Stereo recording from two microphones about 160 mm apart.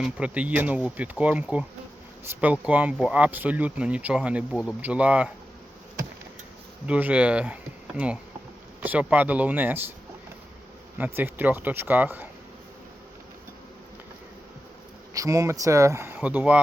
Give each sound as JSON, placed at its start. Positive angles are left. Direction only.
{"t": 0.0, "sound": "speech", "side_deg": -5}
{"t": 6.8, "sound": "speech", "side_deg": -10}
{"t": 10.9, "sound": "speech", "side_deg": -10}
{"t": 15.1, "sound": "speech", "side_deg": -20}